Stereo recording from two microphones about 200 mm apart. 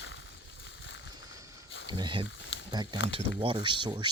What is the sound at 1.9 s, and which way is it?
Speech, 20° right (ahead or behind).